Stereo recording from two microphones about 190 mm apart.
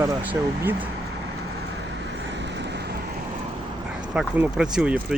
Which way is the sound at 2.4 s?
65° right (ahead or behind).